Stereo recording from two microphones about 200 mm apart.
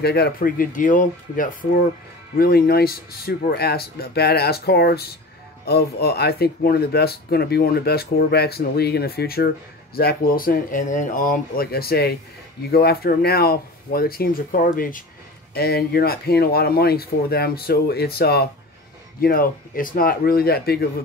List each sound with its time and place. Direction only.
0.0 s speech: 50° left (ahead or behind)